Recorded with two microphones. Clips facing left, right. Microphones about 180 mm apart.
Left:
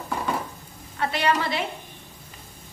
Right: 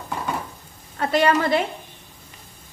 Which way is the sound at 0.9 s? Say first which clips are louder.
Right 5 dB; 45° right (ahead or behind).